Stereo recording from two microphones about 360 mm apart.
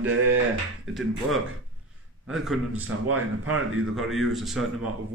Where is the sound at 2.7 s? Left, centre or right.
Right.